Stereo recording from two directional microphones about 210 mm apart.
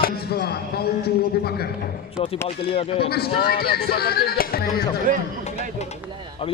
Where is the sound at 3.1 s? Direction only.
50° left (ahead or behind).